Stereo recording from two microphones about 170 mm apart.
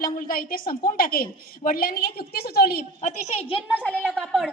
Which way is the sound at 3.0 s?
40° left (ahead or behind).